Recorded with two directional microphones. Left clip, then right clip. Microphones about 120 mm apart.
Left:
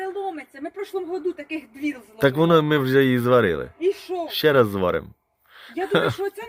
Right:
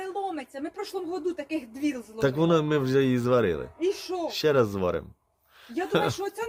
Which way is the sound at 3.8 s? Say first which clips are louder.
Left 4 dB; 40° right (ahead or behind).